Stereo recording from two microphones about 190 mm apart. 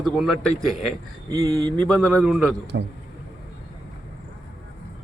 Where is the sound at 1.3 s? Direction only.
20° right (ahead or behind).